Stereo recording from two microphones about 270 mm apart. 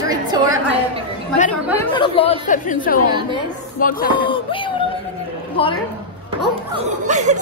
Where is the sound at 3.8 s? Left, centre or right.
Left.